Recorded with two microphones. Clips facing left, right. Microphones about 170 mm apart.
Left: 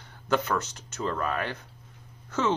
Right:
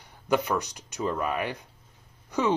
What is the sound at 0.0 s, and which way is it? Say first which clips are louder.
Speech: right 1 dB; 15° right (ahead or behind).